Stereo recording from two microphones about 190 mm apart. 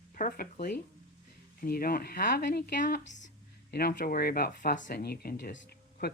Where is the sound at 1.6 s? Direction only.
50° left (ahead or behind).